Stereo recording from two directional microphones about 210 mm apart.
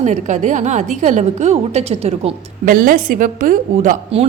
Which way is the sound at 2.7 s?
40° right (ahead or behind).